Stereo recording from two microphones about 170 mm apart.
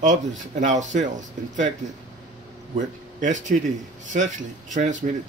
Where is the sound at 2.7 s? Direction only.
45° right (ahead or behind).